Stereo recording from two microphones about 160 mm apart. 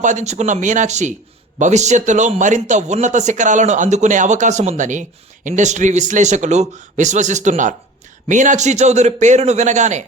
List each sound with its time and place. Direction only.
0.0 s a man's voice: 45° right (ahead or behind)